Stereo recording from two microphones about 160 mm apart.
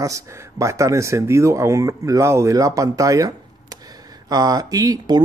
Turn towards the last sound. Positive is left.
turn(degrees=-25)  # may be behind; listen again after turning